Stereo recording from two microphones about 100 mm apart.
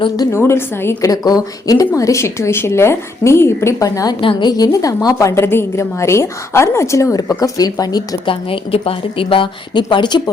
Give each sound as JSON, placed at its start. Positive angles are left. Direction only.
{"t": 0.2, "sound": "a woman's voice", "side_deg": 25}
{"t": 1.1, "sound": "a woman's voice", "side_deg": 40}
{"t": 4.2, "sound": "a woman's voice", "side_deg": 55}
{"t": 8.3, "sound": "a woman's voice", "side_deg": 65}